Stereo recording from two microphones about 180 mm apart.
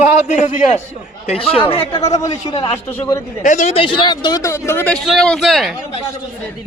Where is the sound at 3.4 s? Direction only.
45° left (ahead or behind); by 5.7 s centre (ahead or behind).